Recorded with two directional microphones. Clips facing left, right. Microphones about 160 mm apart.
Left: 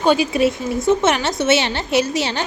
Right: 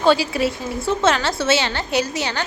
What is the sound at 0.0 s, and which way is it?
Speech, 20° left (ahead or behind).